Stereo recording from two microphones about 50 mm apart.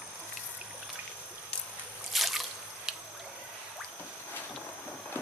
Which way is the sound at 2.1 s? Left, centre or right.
Centre.